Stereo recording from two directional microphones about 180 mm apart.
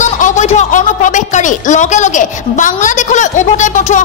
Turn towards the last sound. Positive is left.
turn(degrees=45)  # may be behind; listen again after turning